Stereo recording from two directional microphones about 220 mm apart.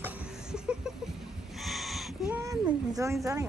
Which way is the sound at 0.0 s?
5° right (ahead or behind).